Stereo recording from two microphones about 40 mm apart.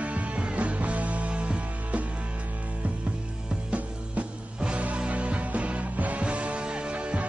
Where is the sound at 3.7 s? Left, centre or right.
Right.